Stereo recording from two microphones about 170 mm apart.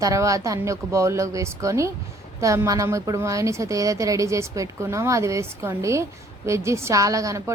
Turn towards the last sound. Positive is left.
turn(degrees=-20)  # may be behind; listen again after turning